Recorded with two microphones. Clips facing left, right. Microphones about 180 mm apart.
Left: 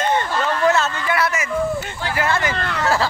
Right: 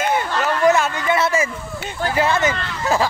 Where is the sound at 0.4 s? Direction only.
15° right (ahead or behind).